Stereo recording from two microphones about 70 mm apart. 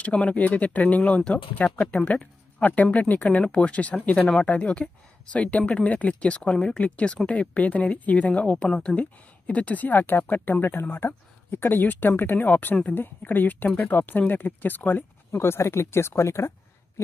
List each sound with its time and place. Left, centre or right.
0.0 s speech: centre; by 16.5 s left